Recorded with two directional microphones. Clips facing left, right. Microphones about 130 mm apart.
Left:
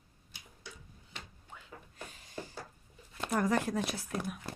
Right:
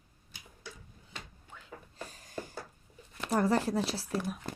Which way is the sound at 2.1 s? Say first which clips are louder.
Right 2 dB; 45° right (ahead or behind).